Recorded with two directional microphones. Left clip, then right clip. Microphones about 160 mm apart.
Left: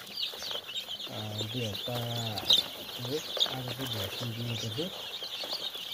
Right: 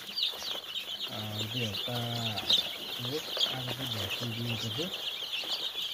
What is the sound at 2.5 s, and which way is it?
Speech, 45° left (ahead or behind).